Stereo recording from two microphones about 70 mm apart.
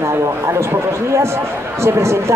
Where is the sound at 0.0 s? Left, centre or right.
Right.